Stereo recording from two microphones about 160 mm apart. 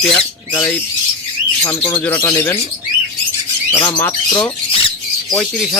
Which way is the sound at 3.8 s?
10° left (ahead or behind).